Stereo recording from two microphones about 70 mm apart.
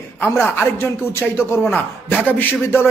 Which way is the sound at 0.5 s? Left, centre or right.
Left.